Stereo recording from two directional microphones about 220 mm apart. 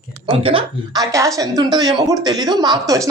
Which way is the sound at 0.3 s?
25° right (ahead or behind).